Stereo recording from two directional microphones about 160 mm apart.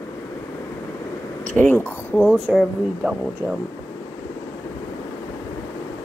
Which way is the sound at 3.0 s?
10° right (ahead or behind).